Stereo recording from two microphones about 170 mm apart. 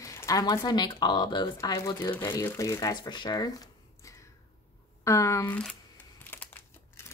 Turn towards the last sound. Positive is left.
turn(degrees=15)  # may be behind; listen again after turning